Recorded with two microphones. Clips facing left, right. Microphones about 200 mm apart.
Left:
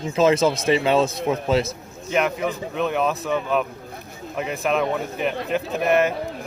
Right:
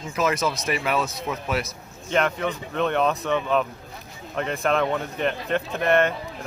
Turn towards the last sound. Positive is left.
turn(degrees=5)  # may be behind; listen again after turning